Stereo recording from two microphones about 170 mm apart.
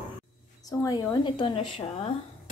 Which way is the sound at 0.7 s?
20° left (ahead or behind).